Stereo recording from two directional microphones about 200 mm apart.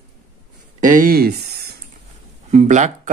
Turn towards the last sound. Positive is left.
turn(degrees=-40)  # may be behind; listen again after turning